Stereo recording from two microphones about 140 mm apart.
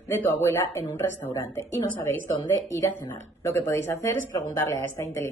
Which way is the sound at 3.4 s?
20° left (ahead or behind).